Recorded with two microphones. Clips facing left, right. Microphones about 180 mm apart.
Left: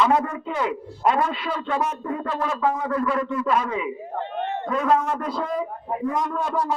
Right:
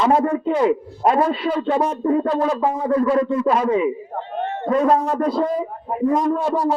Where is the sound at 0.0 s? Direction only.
30° right (ahead or behind).